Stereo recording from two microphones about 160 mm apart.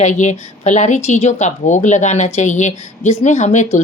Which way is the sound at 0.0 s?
50° left (ahead or behind).